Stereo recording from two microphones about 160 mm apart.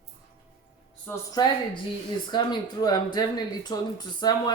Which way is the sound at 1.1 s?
10° left (ahead or behind).